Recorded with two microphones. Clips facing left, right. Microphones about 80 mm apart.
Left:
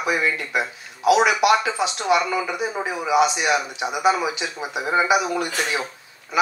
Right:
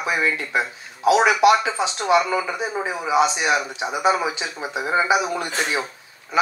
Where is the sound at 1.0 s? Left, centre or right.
Right.